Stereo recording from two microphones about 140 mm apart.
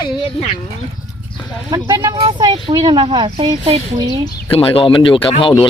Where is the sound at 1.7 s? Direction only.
30° right (ahead or behind).